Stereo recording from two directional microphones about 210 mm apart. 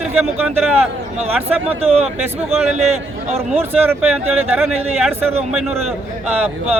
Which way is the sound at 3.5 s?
10° right (ahead or behind).